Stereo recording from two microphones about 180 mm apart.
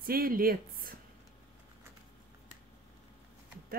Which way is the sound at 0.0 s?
55° right (ahead or behind).